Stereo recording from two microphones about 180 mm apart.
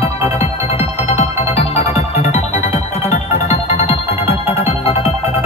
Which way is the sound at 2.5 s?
15° right (ahead or behind).